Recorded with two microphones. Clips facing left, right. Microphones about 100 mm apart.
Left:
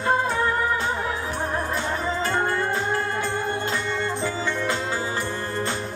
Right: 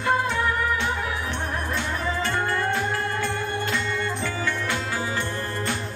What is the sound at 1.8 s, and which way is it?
Music, 35° left (ahead or behind).